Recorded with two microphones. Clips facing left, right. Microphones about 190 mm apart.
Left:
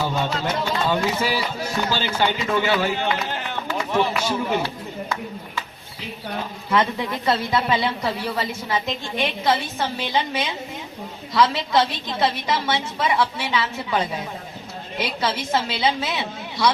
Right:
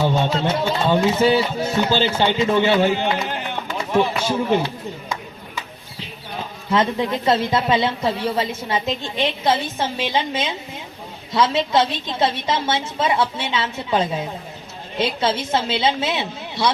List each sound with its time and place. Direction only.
0.0 s speech: 25° right (ahead or behind)
6.7 s speech: 25° right (ahead or behind)